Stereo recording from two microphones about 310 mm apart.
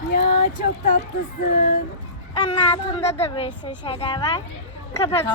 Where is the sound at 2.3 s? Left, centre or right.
Centre.